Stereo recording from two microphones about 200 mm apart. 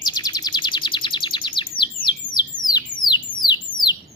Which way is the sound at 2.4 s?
20° left (ahead or behind).